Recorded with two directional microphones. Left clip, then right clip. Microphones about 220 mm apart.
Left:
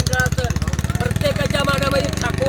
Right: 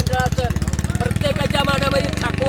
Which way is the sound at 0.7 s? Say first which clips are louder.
Even; 5° left (ahead or behind).